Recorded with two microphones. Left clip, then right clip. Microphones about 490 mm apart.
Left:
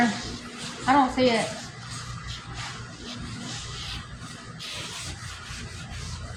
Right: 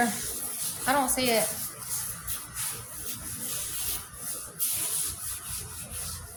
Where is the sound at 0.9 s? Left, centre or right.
Right.